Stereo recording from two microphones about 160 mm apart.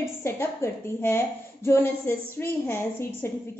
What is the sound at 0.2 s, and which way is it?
A woman's voice, 15° left (ahead or behind).